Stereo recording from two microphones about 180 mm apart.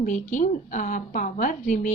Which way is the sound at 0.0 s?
45° left (ahead or behind).